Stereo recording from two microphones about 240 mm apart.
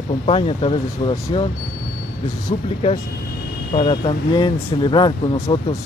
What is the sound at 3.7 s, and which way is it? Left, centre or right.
Speech, left.